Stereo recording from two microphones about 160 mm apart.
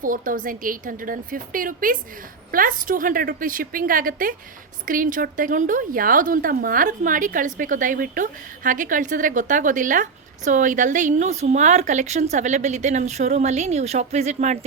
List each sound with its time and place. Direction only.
0.0 s a woman's voice: 60° right (ahead or behind)